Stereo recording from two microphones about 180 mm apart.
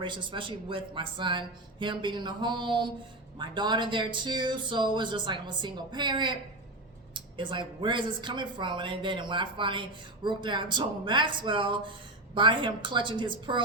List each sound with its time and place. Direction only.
0.0 s speech: 25° right (ahead or behind)